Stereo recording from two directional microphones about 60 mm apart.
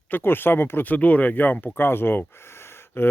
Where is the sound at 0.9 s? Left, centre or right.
Left.